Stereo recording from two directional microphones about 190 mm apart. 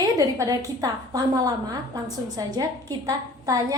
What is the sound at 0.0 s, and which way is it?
A woman's voice, 20° right (ahead or behind).